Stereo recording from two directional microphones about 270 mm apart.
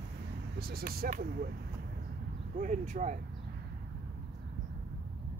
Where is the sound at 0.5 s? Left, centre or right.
Right.